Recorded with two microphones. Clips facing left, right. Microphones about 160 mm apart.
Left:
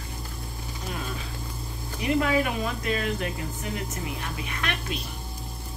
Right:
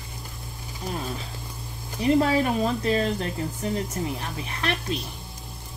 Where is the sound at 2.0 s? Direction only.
30° right (ahead or behind).